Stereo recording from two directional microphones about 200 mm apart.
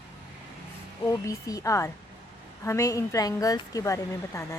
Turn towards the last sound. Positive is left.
turn(degrees=15)  # may be behind; listen again after turning